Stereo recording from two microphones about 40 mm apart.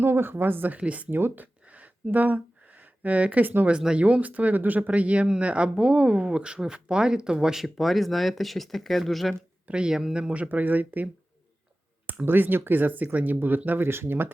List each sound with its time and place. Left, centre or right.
0.0 s speech: right
0.8 s speech: right
1.1 s speech: right
1.7 s a sound: right
3.7 s speech: right
4.0 s speech: right
4.9 s speech: right; by 9.3 s centre
9.6 s speech: right
9.9 s speech: centre
10.5 s speech: right
12.2 s speech: right
13.7 s speech: right